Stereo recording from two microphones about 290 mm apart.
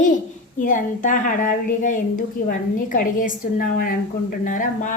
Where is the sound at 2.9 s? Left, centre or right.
Left.